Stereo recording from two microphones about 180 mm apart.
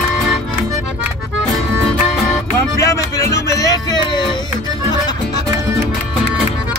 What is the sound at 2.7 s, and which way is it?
Music, 20° left (ahead or behind).